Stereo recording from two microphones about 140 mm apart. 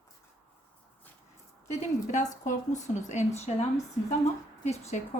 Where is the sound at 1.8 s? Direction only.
60° left (ahead or behind).